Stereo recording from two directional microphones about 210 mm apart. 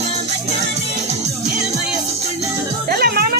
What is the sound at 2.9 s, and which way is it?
Music, 45° right (ahead or behind).